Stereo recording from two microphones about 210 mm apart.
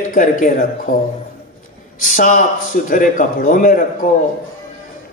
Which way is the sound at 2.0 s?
40° left (ahead or behind).